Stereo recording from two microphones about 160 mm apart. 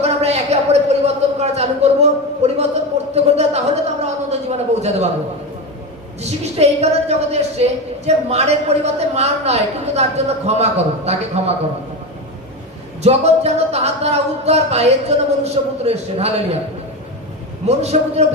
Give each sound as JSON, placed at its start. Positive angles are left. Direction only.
{"t": 0.0, "sound": "a sound", "side_deg": -40}
{"t": 3.2, "sound": "speech", "side_deg": -40}
{"t": 6.2, "sound": "a woman's voice", "side_deg": -40}
{"t": 13.0, "sound": "a woman's voice", "side_deg": -40}
{"t": 17.7, "sound": "a man's voice", "side_deg": -40}